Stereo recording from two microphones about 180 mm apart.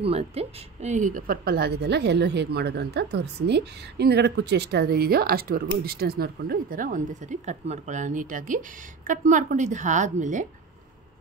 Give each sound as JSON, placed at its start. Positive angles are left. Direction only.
{"t": 0.0, "sound": "a woman's voice", "side_deg": -35}